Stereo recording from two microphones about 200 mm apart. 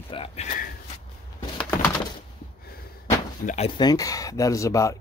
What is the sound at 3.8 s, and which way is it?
Speech, 20° left (ahead or behind).